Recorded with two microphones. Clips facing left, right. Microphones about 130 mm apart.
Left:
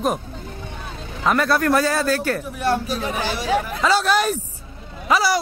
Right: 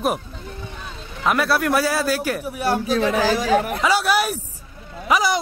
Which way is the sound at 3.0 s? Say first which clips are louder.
Right 5 dB; 90° right.